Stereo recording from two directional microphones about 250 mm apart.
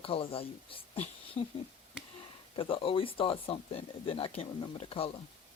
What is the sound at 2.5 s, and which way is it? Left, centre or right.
Speech, left.